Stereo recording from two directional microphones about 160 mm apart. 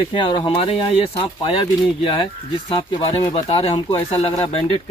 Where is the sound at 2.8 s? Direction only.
25° left (ahead or behind).